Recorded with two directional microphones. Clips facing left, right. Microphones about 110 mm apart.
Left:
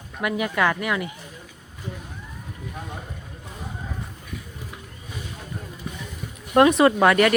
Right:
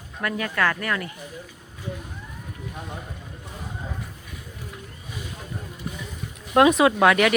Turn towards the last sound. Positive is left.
turn(degrees=0)  # may be behind; listen again after turning